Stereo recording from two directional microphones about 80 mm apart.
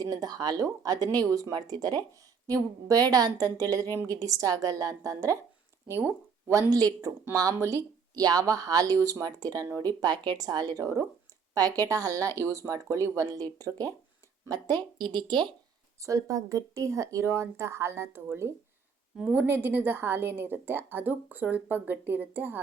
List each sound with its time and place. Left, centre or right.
0.0 s speech: right
6.5 s speech: right
7.5 s speech: right
8.1 s speech: right
14.4 s speech: right
16.0 s speech: right
19.2 s a woman's voice: right